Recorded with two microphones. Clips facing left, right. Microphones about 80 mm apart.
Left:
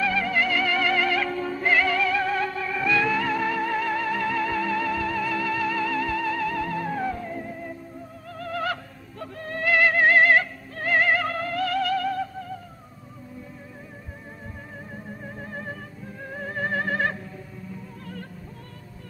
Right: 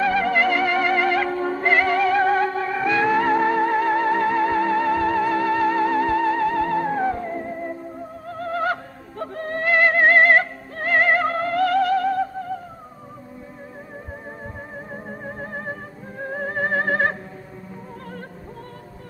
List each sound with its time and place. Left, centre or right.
0.0 s music: right
15.0 s music: right